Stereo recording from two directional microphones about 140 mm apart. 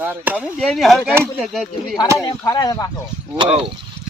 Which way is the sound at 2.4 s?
25° left (ahead or behind).